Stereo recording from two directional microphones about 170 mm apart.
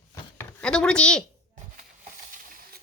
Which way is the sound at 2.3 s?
55° right (ahead or behind).